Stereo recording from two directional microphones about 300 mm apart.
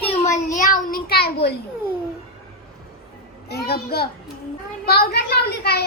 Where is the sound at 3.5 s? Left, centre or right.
Left.